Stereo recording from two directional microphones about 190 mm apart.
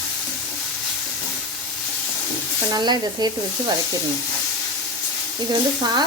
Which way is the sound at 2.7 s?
20° right (ahead or behind).